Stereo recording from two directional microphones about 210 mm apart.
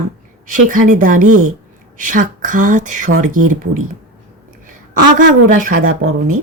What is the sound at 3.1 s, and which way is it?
Speech, 90° right.